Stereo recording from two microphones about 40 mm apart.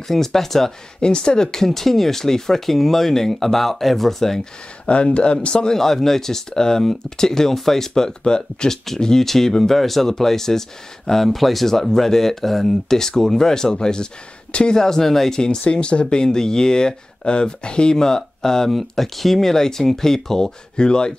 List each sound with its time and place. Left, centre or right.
0.1 s speech: centre
1.0 s speech: left; by 4.4 s centre
4.8 s speech: left
5.8 s speech: centre; by 14.8 s left
14.8 s speech: centre
18.7 s speech: centre; by 21.1 s left